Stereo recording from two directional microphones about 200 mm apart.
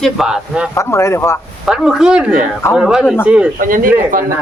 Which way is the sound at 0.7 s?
15° left (ahead or behind).